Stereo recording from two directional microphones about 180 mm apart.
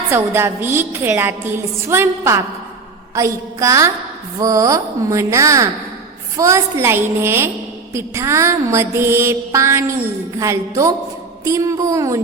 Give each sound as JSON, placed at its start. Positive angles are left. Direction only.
{"t": 0.1, "sound": "a woman's voice", "side_deg": -15}